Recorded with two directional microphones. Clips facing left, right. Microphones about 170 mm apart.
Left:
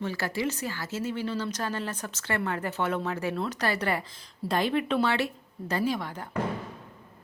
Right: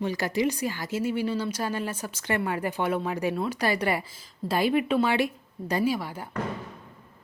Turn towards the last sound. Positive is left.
turn(degrees=-10)  # may be behind; listen again after turning